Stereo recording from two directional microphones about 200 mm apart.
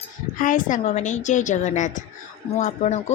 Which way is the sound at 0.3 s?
40° left (ahead or behind).